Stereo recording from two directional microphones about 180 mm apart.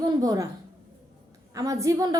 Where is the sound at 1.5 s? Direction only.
20° right (ahead or behind).